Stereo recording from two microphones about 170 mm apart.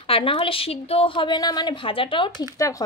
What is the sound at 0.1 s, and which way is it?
A woman's voice, 30° left (ahead or behind).